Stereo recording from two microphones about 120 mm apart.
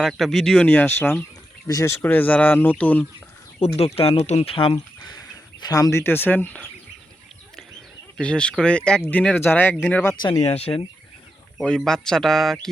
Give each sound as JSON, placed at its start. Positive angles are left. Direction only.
{"t": 0.0, "sound": "speech", "side_deg": 0}
{"t": 1.6, "sound": "speech", "side_deg": 25}
{"t": 2.0, "sound": "speech", "side_deg": 15}
{"t": 3.6, "sound": "speech", "side_deg": 55}
{"t": 5.5, "sound": "speech", "side_deg": 30}
{"t": 8.2, "sound": "speech", "side_deg": 10}
{"t": 10.3, "sound": "speech", "side_deg": 60}
{"t": 11.5, "sound": "speech", "side_deg": 5}